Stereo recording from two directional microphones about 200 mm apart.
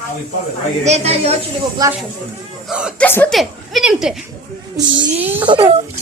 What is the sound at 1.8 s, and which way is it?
Speech, 20° right (ahead or behind).